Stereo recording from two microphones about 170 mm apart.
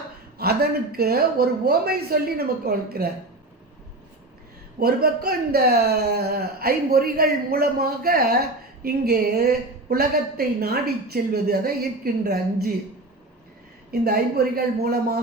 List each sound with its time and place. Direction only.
0.3 s speech: 65° right (ahead or behind)
4.8 s speech: 65° right (ahead or behind)
13.9 s speech: 65° right (ahead or behind)